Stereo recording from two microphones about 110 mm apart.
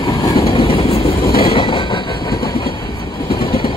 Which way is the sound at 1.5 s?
45° left (ahead or behind).